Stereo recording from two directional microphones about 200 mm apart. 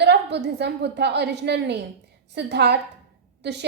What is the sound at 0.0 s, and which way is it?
A woman's voice, 60° right (ahead or behind).